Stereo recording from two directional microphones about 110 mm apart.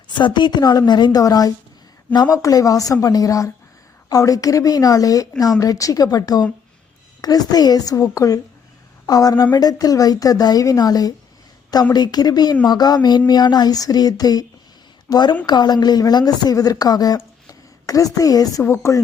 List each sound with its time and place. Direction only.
0.1 s speech: 45° left (ahead or behind)
17.2 s a sound: 30° left (ahead or behind)
18.6 s speech: 25° left (ahead or behind)